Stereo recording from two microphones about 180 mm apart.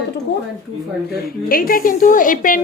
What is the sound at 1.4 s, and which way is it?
A woman's voice, 55° left (ahead or behind).